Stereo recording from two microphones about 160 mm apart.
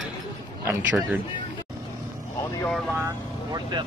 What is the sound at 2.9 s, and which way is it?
Speech, 20° right (ahead or behind).